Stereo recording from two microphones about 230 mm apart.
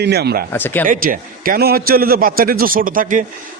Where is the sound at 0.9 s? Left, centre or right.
Right.